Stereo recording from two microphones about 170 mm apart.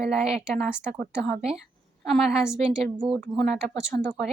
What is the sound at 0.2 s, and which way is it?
Speech, centre (ahead or behind).